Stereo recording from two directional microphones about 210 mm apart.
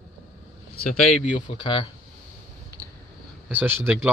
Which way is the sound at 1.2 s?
20° left (ahead or behind).